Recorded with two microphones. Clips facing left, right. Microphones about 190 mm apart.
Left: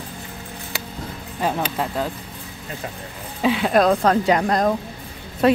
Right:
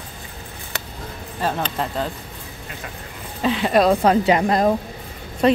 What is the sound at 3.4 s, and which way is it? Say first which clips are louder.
Speech: even; 5° left (ahead or behind).